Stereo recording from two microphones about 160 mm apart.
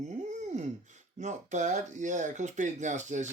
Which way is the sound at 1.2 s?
50° right (ahead or behind).